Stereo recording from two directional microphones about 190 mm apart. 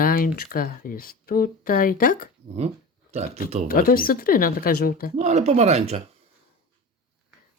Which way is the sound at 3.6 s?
50° left (ahead or behind).